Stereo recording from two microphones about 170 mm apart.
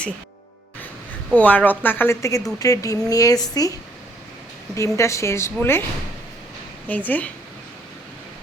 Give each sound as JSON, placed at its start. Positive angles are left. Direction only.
{"t": 1.4, "sound": "a woman's voice", "side_deg": 10}
{"t": 6.8, "sound": "a woman's voice", "side_deg": 10}